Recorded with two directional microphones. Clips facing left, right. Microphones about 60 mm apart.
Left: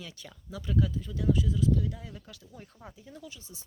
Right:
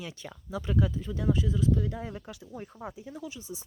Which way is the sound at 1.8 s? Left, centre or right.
Right.